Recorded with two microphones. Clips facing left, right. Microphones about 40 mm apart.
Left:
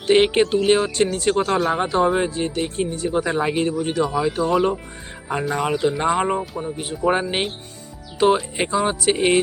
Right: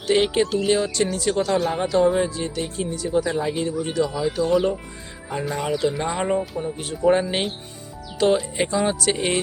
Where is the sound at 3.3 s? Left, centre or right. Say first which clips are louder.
Left 3 dB; left.